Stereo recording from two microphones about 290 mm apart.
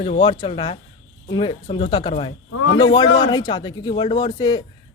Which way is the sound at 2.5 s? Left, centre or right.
Left.